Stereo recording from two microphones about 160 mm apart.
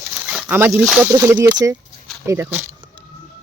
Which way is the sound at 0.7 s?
Centre (ahead or behind).